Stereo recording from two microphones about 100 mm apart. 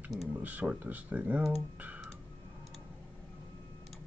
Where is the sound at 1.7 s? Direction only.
15° right (ahead or behind).